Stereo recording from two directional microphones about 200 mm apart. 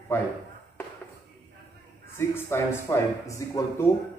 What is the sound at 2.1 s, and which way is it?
Speech, 10° left (ahead or behind).